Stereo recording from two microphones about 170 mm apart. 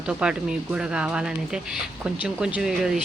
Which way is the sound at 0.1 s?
5° right (ahead or behind).